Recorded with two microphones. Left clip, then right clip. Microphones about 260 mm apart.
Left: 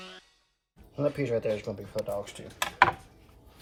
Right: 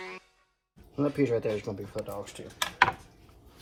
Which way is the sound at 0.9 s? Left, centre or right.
Centre.